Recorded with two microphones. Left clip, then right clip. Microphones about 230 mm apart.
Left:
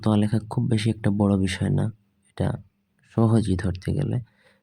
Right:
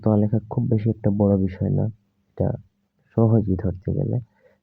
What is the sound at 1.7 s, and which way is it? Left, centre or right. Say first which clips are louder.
Speech: right 2 dB; centre.